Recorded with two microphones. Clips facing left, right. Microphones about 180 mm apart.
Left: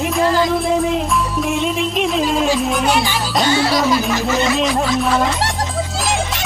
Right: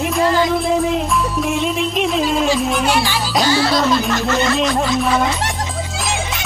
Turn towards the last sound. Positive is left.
turn(degrees=0)  # may be behind; listen again after turning